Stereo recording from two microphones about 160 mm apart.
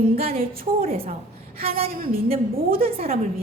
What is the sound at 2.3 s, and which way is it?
Speech, 35° right (ahead or behind).